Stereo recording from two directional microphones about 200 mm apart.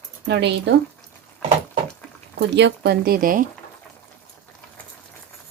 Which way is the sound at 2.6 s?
60° right (ahead or behind).